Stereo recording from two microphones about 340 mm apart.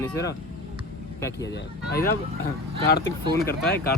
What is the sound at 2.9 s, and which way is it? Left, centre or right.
Speech, left.